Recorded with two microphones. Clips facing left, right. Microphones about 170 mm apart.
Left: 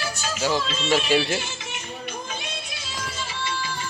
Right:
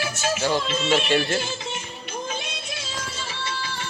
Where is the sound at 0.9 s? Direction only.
5° left (ahead or behind).